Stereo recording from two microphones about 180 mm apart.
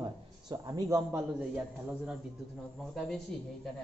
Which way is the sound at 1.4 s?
5° right (ahead or behind).